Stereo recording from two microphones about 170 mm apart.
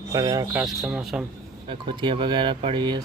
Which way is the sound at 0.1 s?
20° right (ahead or behind).